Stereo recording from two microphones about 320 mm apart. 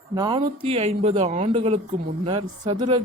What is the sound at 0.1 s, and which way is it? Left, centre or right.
Speech, centre.